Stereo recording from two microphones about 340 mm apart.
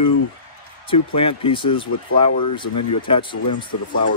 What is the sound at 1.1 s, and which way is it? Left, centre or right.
Speech, centre.